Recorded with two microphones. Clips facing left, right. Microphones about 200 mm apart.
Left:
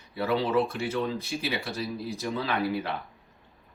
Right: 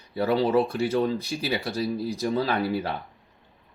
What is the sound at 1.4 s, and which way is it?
Speech, 35° right (ahead or behind).